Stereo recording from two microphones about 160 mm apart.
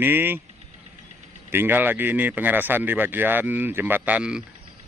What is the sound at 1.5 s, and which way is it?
Speech, 15° right (ahead or behind).